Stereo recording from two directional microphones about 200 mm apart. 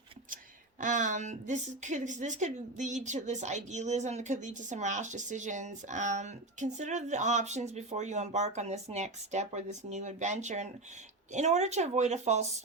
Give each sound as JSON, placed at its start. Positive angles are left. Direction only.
{"t": 0.8, "sound": "a woman's voice", "side_deg": -40}